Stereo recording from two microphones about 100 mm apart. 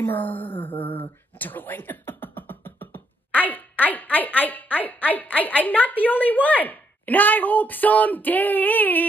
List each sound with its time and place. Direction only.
0.0 s speech: 20° left (ahead or behind)